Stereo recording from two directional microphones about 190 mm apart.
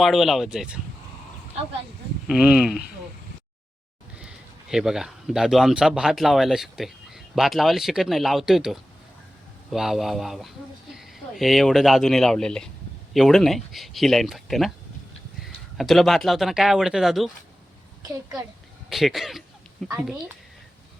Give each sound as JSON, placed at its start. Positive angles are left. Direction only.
{"t": 0.0, "sound": "speech", "side_deg": 0}
{"t": 2.2, "sound": "speech", "side_deg": -5}
{"t": 4.2, "sound": "speech", "side_deg": -5}
{"t": 15.8, "sound": "speech", "side_deg": 0}
{"t": 18.9, "sound": "speech", "side_deg": 0}